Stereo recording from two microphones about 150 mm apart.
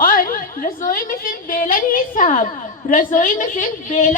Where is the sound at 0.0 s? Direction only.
70° left (ahead or behind).